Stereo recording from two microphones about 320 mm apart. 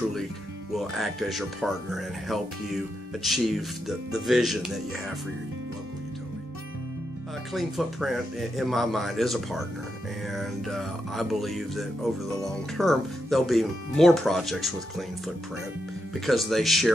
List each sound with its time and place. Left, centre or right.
0.7 s speech: centre
7.5 s speech: centre